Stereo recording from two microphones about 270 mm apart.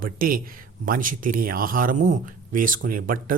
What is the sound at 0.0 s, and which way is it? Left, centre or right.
Speech, right.